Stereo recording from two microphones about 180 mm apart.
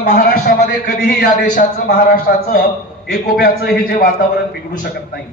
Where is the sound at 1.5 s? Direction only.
55° left (ahead or behind).